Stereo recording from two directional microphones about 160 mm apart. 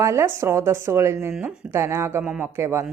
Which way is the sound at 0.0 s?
15° right (ahead or behind).